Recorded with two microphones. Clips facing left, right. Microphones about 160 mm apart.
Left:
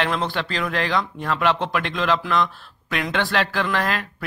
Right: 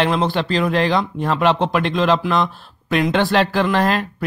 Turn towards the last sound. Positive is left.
turn(degrees=-30)  # may be behind; listen again after turning